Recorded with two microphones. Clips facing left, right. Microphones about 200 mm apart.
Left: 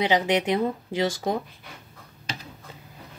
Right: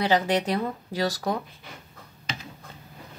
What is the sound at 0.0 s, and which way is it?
Speech, 20° left (ahead or behind).